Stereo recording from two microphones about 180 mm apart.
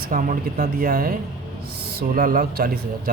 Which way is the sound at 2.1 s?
50° right (ahead or behind).